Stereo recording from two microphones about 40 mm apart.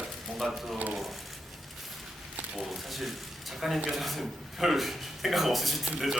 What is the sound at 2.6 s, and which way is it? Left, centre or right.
A man's voice, centre.